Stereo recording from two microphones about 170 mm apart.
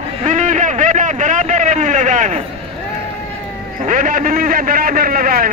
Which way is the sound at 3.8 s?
50° right (ahead or behind).